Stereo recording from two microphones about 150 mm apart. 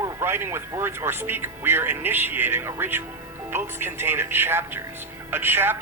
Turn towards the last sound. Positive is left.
turn(degrees=-15)  # may be behind; listen again after turning